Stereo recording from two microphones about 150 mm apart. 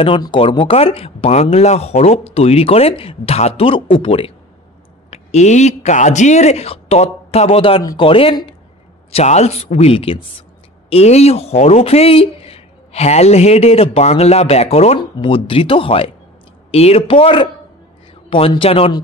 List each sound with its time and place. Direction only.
0.0 s speech: 35° left (ahead or behind)
5.1 s speech: 50° left (ahead or behind)
9.1 s speech: 45° left (ahead or behind)
15.0 s speech: 35° left (ahead or behind)